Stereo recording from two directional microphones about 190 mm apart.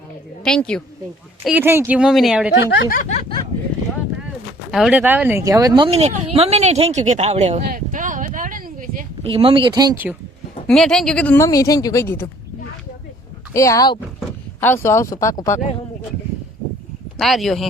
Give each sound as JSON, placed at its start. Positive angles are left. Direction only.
{"t": 0.4, "sound": "speech", "side_deg": 5}
{"t": 1.5, "sound": "speech", "side_deg": -10}
{"t": 2.6, "sound": "speech", "side_deg": 60}
{"t": 4.7, "sound": "speech", "side_deg": -5}
{"t": 7.7, "sound": "a sound", "side_deg": -45}
{"t": 9.2, "sound": "speech", "side_deg": -25}
{"t": 10.7, "sound": "a woman's voice", "side_deg": 5}
{"t": 13.5, "sound": "a woman's voice", "side_deg": 15}
{"t": 17.2, "sound": "speech", "side_deg": 0}